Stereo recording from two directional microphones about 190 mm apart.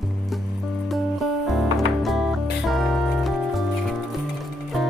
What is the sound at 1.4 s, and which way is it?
Music, centre (ahead or behind).